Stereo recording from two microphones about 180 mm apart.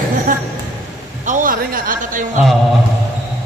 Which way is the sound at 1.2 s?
45° right (ahead or behind).